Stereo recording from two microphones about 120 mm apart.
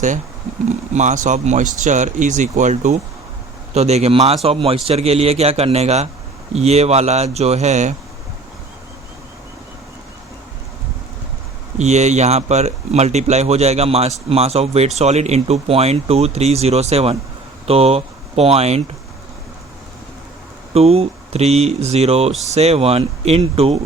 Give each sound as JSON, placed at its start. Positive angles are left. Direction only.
{"t": 0.7, "sound": "speech", "side_deg": -85}
{"t": 3.8, "sound": "speech", "side_deg": -65}
{"t": 11.8, "sound": "speech", "side_deg": -70}
{"t": 20.7, "sound": "speech", "side_deg": -60}